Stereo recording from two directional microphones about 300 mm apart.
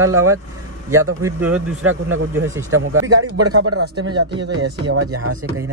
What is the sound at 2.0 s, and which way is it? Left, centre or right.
A man's voice, right.